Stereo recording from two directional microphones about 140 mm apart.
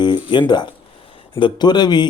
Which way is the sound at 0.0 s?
35° left (ahead or behind).